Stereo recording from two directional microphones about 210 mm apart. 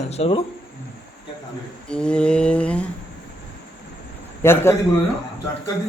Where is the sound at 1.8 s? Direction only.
5° left (ahead or behind).